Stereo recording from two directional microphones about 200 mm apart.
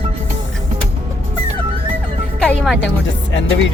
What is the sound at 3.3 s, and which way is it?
Music, 65° left (ahead or behind).